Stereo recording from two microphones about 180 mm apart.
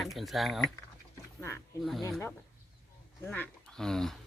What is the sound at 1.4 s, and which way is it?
Speech, 15° left (ahead or behind).